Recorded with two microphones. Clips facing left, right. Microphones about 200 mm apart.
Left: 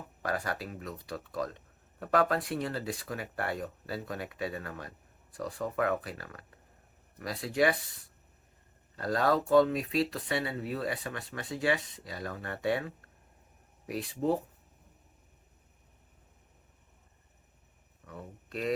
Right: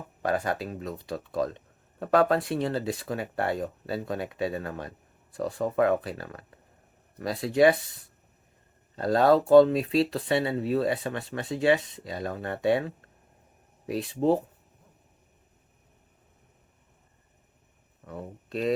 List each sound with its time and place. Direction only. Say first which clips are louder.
0.2 s speech: right 6 dB; 25° right (ahead or behind)
9.0 s speech: right 7 dB; 25° right (ahead or behind)
18.4 s speech: right 6 dB; 25° right (ahead or behind)